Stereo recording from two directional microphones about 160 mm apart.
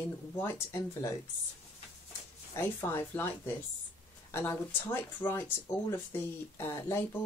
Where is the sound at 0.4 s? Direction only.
15° left (ahead or behind).